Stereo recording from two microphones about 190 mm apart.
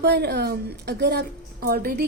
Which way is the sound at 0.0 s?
60° right (ahead or behind).